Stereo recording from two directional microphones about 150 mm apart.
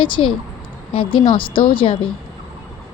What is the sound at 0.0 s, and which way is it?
Speech, 35° left (ahead or behind).